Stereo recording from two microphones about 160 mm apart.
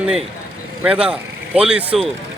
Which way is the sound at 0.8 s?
10° right (ahead or behind).